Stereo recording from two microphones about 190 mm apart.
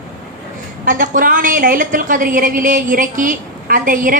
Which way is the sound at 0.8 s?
45° right (ahead or behind).